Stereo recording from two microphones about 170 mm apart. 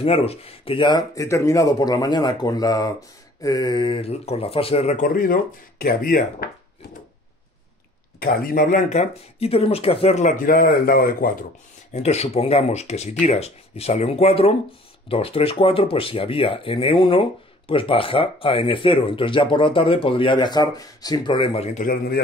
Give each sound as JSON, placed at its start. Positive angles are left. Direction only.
{"t": 0.0, "sound": "speech", "side_deg": 35}
{"t": 8.2, "sound": "speech", "side_deg": 60}
{"t": 11.9, "sound": "speech", "side_deg": 40}
{"t": 21.7, "sound": "a man's voice", "side_deg": 55}